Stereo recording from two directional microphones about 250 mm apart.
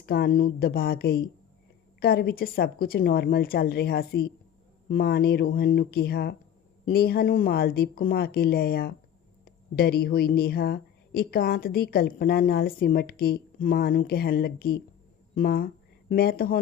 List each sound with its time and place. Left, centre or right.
0.0 s speech: left